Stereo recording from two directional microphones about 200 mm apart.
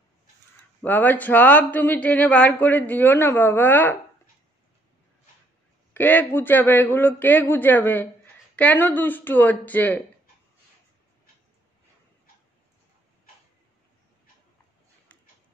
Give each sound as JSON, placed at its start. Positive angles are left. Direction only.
{"t": 0.8, "sound": "speech", "side_deg": 10}
{"t": 5.9, "sound": "speech", "side_deg": 10}